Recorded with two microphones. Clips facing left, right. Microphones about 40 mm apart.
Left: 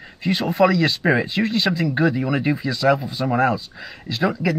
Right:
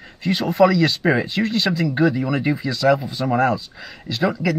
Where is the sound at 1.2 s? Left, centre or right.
Centre.